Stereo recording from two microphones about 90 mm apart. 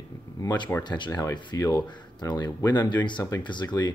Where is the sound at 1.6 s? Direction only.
45° left (ahead or behind).